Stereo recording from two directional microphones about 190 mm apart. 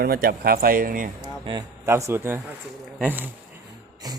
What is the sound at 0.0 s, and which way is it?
Speech, 50° right (ahead or behind).